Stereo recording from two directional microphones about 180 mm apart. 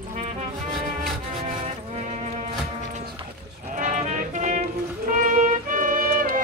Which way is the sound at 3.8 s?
45° right (ahead or behind).